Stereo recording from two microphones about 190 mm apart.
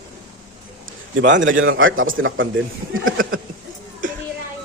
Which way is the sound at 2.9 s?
90° right.